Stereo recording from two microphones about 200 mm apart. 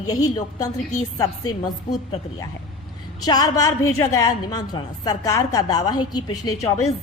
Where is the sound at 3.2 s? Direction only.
20° left (ahead or behind).